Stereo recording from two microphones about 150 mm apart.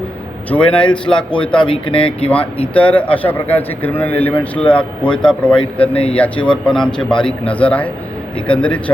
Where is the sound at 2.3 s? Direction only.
10° left (ahead or behind).